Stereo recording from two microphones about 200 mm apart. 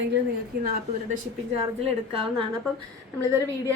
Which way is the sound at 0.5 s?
50° right (ahead or behind).